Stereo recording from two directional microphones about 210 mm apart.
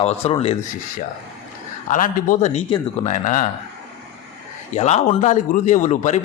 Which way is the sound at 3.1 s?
35° left (ahead or behind).